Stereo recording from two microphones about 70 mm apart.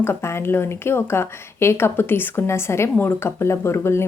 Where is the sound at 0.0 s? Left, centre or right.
Left.